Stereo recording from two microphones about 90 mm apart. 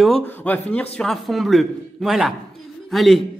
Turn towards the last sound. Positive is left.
turn(degrees=0)  # may be behind; listen again after turning